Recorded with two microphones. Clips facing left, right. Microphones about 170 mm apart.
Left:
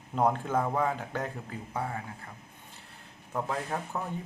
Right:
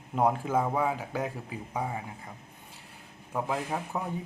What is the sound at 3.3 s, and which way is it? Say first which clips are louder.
Speech: right 1 dB; 10° right (ahead or behind).